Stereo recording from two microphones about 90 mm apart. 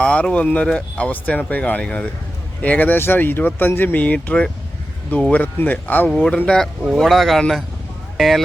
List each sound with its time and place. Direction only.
0.0 s speech: 10° left (ahead or behind)